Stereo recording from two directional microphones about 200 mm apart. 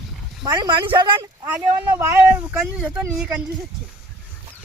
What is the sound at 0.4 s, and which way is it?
Speech, 20° right (ahead or behind).